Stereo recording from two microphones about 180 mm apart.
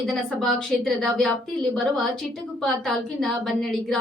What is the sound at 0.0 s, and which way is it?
A woman's voice, centre (ahead or behind).